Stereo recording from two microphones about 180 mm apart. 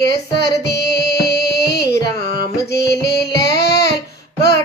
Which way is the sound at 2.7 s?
65° left (ahead or behind).